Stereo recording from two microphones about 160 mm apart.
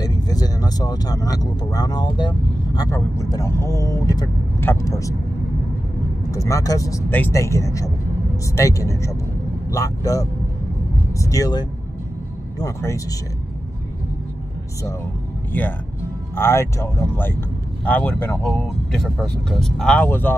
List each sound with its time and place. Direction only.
0.0 s speech: 25° left (ahead or behind)
6.3 s speech: 20° left (ahead or behind)
16.3 s speech: 15° left (ahead or behind)